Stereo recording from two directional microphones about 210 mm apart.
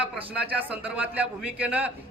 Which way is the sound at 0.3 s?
5° right (ahead or behind).